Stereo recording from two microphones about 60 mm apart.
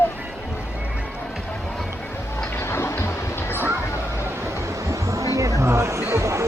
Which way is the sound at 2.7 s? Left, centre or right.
Left.